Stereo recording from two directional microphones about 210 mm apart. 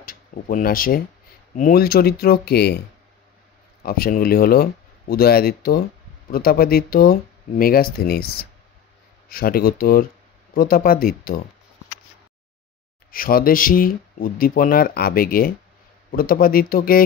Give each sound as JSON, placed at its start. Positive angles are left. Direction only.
{"t": 0.0, "sound": "speech", "side_deg": 40}
{"t": 3.8, "sound": "speech", "side_deg": 45}
{"t": 13.1, "sound": "speech", "side_deg": 45}